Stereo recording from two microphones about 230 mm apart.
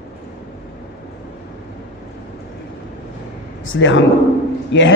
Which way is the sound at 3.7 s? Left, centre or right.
Left.